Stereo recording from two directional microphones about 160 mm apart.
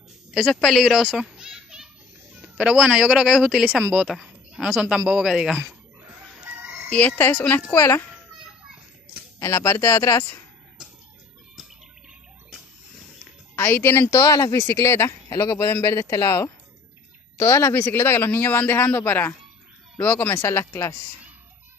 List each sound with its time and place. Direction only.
0.3 s a child's voice: centre (ahead or behind)
6.9 s speech: 10° left (ahead or behind)
9.4 s speech: 15° left (ahead or behind)
13.6 s speech: 15° left (ahead or behind)